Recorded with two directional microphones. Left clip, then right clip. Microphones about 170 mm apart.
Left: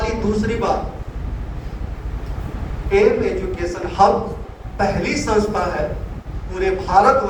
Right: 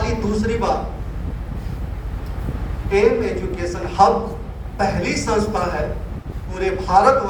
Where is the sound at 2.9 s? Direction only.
30° right (ahead or behind).